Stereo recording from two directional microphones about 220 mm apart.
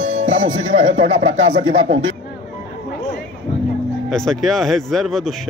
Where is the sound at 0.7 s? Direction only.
35° right (ahead or behind).